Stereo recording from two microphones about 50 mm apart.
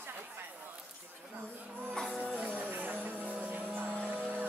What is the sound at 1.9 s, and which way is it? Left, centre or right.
Music, centre.